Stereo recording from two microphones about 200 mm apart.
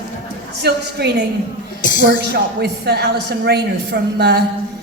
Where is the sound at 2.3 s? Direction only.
55° right (ahead or behind).